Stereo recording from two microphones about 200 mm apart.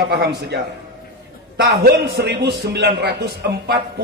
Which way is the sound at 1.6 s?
50° right (ahead or behind).